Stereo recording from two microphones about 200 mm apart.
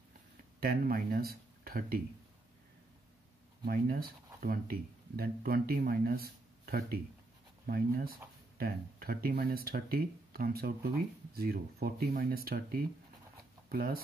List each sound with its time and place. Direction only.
0.6 s speech: 45° right (ahead or behind)
3.6 s speech: 50° right (ahead or behind)